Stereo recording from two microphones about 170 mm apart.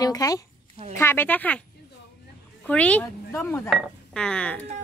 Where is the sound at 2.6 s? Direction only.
5° left (ahead or behind).